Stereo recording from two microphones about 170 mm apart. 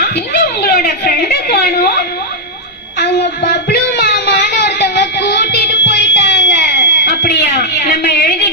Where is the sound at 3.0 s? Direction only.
80° left.